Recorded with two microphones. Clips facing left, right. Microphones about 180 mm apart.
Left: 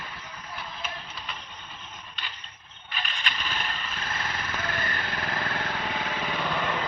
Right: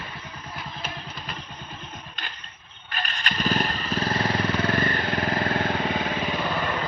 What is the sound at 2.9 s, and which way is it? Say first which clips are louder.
Motorcycle: right 4 dB; 45° right (ahead or behind).